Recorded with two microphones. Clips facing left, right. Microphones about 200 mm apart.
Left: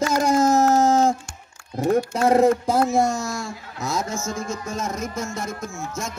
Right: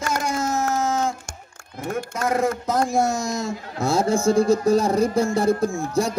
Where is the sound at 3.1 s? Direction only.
20° right (ahead or behind).